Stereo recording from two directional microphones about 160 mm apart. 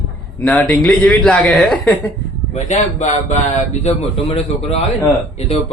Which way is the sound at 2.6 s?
50° left (ahead or behind).